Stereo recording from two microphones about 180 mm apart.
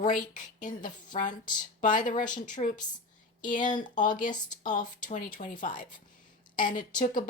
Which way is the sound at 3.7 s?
25° left (ahead or behind).